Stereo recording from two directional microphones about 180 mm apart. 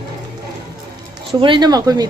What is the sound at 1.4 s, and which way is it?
Speech, 25° right (ahead or behind).